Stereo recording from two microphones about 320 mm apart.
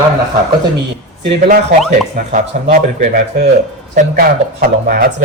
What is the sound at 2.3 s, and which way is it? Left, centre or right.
Speech, right.